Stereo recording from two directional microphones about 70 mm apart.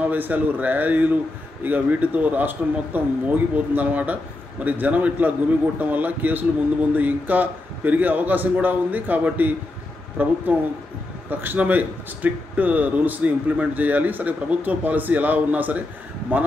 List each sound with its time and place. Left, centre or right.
0.0 s a man's voice: right